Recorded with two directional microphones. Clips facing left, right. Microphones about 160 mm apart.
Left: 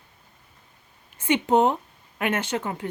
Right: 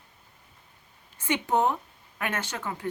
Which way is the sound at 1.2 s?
20° left (ahead or behind).